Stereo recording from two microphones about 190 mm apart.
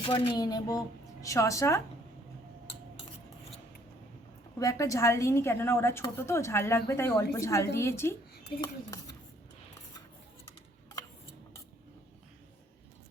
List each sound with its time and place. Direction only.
0.0 s a woman's voice: 25° left (ahead or behind)
4.6 s a woman's voice: 15° left (ahead or behind)